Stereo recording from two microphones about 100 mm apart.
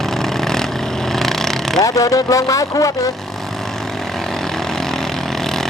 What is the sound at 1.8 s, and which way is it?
Speech, 35° left (ahead or behind).